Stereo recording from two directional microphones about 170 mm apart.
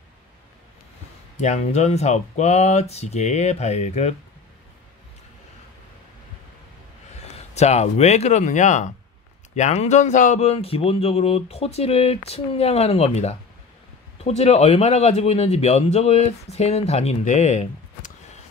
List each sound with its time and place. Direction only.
1.3 s speech: 45° left (ahead or behind)
7.2 s speech: 40° left (ahead or behind)